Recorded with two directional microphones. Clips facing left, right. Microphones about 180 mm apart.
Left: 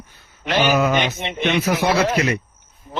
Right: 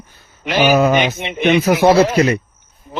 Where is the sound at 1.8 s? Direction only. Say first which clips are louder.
Right 9 dB; 35° right (ahead or behind).